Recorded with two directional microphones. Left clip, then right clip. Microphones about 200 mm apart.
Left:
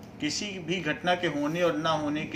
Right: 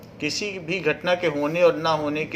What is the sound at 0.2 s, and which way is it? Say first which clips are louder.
A man's voice: right 5 dB; 40° right (ahead or behind).